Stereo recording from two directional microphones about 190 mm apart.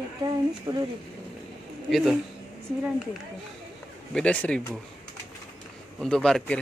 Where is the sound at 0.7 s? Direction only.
20° right (ahead or behind).